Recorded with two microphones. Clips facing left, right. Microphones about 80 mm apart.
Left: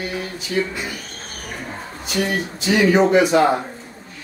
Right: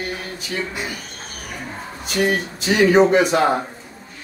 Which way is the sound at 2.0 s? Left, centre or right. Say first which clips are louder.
Right 2 dB; right.